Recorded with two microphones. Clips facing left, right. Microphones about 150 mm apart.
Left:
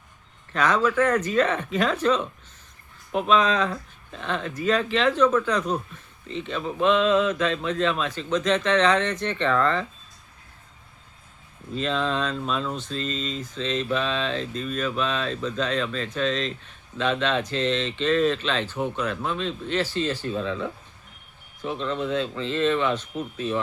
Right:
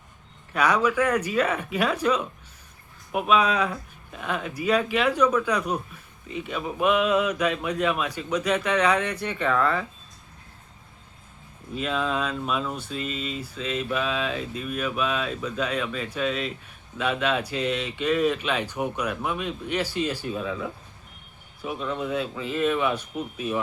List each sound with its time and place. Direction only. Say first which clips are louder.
0.5 s speech: even; 10° right (ahead or behind)
11.7 s speech: left 1 dB; 10° right (ahead or behind)